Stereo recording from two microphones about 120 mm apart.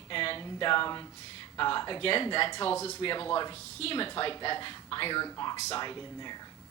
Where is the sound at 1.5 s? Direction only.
40° left (ahead or behind).